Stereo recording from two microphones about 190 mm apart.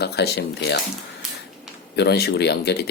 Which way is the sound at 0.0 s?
60° left (ahead or behind).